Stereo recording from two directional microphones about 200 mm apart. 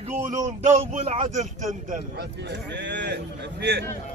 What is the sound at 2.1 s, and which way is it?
Speech, 60° right (ahead or behind).